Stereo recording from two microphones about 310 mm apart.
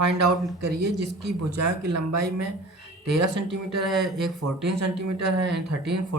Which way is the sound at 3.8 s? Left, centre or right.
Centre.